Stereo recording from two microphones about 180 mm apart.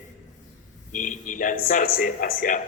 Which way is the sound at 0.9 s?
45° left (ahead or behind).